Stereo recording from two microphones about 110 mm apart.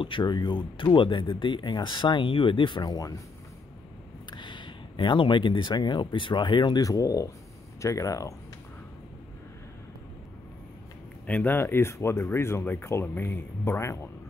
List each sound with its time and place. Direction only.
0.0 s speech: 45° left (ahead or behind)
4.3 s speech: 45° left (ahead or behind); by 8.4 s 30° left (ahead or behind)
11.2 s speech: 15° left (ahead or behind)